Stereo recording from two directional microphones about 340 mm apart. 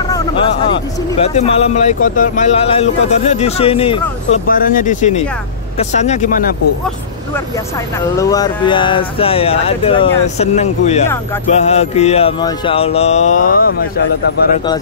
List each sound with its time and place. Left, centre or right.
1.2 s a man's voice: centre
8.2 s a man's voice: centre